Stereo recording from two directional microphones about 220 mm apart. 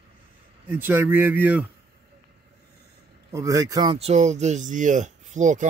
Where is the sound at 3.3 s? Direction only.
15° right (ahead or behind); by 5.6 s 35° right (ahead or behind).